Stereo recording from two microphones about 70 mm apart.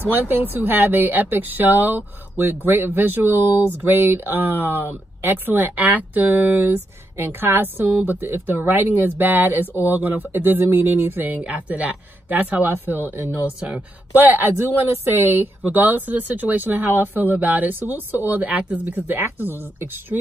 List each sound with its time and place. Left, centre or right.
0.1 s speech: right
6.6 s a woman's voice: right
13.6 s speech: centre
18.9 s speech: right